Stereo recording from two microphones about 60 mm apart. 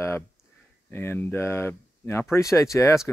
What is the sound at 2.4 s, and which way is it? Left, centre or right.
Speech, left.